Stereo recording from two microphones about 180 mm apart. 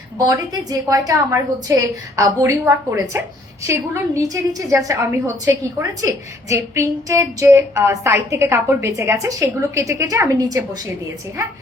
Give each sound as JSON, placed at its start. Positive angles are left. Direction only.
{"t": 0.2, "sound": "a woman's voice", "side_deg": -20}